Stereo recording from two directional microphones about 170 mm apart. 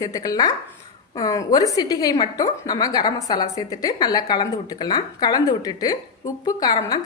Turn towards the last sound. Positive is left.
turn(degrees=25)  # may be behind; listen again after turning